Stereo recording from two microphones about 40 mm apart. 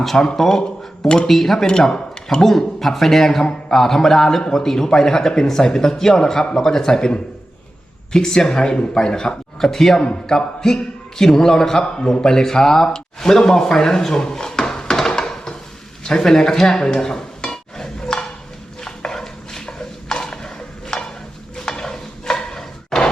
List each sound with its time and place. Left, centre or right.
0.0 s speech: centre
1.0 s a man's voice: left
1.3 s a man's voice: centre
8.1 s a man's voice: centre
9.6 s speech: centre
14.1 s drawer open or close: centre
16.0 s stir: centre
18.8 s dishes: centre
21.5 s a sound: centre